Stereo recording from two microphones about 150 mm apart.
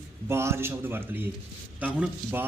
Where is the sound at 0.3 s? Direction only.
15° right (ahead or behind).